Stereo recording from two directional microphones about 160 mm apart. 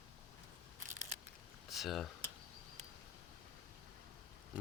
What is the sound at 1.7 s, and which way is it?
Speech, centre (ahead or behind).